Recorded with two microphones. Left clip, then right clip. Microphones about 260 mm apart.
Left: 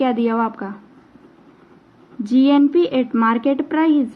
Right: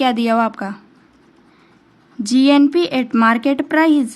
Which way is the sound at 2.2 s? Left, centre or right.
Right.